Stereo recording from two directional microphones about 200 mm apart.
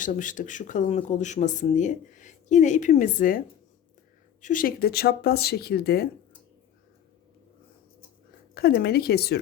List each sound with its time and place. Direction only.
0.0 s speech: 40° left (ahead or behind)
8.5 s speech: 50° left (ahead or behind)